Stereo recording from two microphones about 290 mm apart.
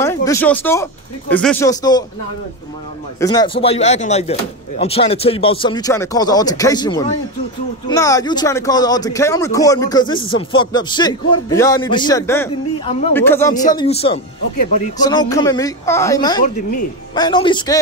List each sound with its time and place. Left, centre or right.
0.0 s speech: centre
3.2 s speech: centre